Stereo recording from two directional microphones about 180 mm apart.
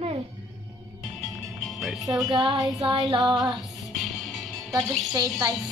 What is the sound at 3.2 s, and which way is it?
Music, centre (ahead or behind).